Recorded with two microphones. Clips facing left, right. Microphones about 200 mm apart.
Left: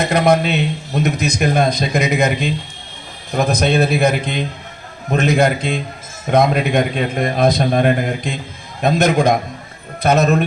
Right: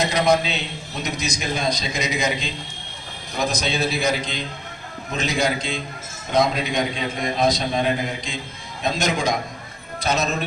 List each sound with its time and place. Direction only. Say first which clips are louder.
0.0 s a man's voice: left 5 dB; 55° left (ahead or behind)